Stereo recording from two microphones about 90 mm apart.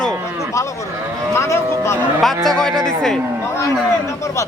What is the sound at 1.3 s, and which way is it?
Cattle, 30° left (ahead or behind).